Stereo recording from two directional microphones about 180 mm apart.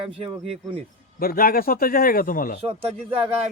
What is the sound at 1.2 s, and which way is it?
A man's voice, 55° left (ahead or behind).